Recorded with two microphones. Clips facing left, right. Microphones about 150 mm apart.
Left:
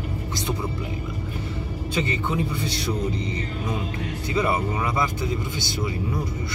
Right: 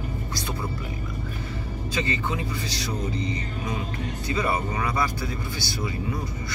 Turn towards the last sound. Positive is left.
turn(degrees=20)  # may be behind; listen again after turning